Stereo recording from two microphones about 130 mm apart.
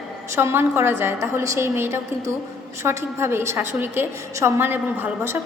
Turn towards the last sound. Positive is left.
turn(degrees=-15)  # may be behind; listen again after turning